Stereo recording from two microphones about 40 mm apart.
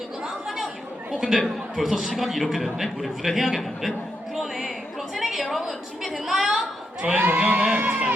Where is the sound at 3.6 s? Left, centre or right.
Centre.